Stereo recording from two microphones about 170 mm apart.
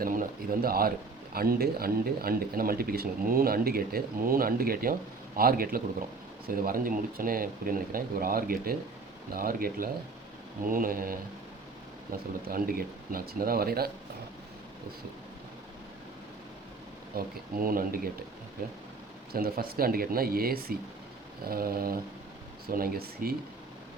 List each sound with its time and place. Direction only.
0.0 s speech: 55° right (ahead or behind)
17.2 s speech: 55° right (ahead or behind)